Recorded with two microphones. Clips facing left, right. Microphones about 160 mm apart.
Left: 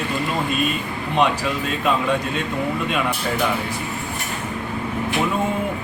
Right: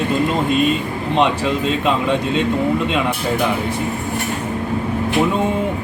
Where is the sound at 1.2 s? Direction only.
20° right (ahead or behind).